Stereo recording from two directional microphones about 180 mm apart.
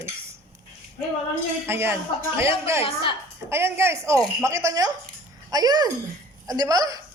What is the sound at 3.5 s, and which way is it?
A woman's voice, 15° right (ahead or behind).